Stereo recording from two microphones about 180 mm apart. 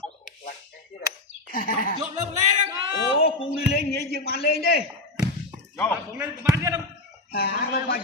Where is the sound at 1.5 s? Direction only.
50° left (ahead or behind).